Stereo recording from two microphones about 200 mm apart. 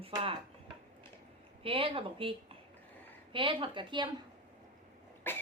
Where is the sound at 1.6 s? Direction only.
25° right (ahead or behind).